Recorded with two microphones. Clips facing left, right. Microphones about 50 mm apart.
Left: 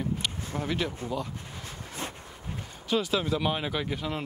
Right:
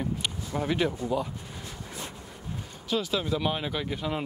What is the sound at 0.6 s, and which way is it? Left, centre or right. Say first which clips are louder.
Speech: right 4 dB; centre.